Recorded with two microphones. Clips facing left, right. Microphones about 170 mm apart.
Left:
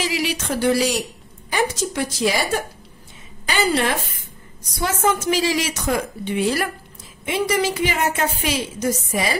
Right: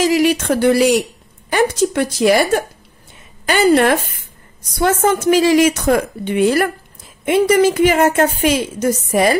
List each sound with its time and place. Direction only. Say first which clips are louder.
0.0 s a woman's voice: right 10 dB; 50° right (ahead or behind)
3.4 s a woman's voice: right 8 dB; 55° right (ahead or behind)